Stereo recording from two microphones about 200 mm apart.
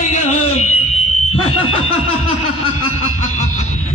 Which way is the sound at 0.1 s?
35° left (ahead or behind).